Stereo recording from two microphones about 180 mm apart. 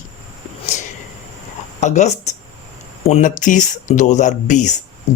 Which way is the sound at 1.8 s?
40° left (ahead or behind).